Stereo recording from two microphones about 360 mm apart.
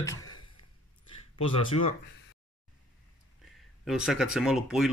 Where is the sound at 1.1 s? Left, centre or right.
Centre.